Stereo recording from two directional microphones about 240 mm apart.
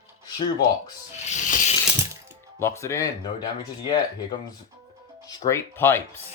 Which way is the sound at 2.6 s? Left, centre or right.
Centre.